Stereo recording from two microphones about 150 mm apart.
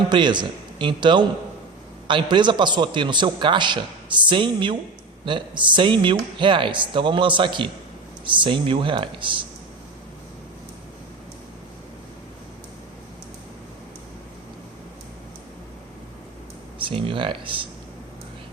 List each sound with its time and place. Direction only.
0.1 s a man's voice: 30° right (ahead or behind)
16.9 s a man's voice: 35° right (ahead or behind)